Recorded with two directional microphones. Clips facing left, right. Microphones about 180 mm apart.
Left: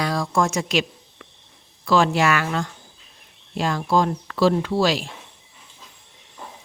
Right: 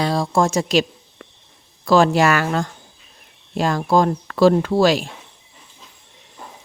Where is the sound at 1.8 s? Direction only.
40° right (ahead or behind).